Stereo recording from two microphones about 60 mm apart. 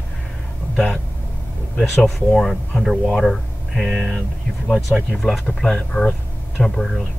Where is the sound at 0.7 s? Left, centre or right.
Centre.